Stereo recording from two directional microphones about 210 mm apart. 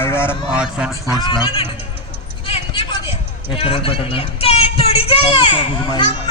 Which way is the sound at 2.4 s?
25° left (ahead or behind).